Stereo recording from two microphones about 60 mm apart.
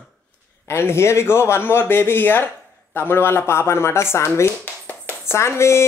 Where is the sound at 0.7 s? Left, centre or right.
Left.